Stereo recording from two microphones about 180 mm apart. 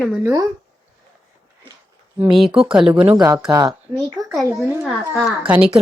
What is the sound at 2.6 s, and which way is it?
Speech, 30° right (ahead or behind).